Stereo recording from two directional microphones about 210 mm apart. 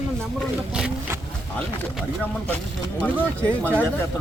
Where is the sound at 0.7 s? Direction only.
5° right (ahead or behind).